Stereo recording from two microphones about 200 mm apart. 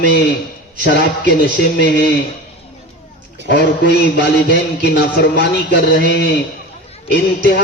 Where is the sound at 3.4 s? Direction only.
60° left (ahead or behind).